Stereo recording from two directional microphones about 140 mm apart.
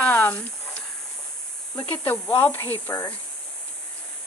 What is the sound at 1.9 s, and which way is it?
Speech, 15° left (ahead or behind).